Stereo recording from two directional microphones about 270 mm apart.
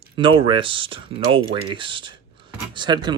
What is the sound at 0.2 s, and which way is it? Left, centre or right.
Speech, centre.